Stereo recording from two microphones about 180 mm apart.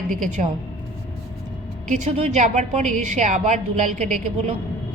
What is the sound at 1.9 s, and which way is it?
A woman's voice, 40° right (ahead or behind).